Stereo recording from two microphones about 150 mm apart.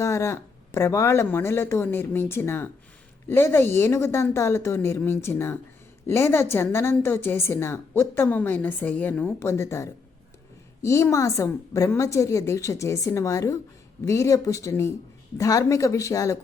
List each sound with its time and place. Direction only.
0.0 s a woman's voice: 20° left (ahead or behind)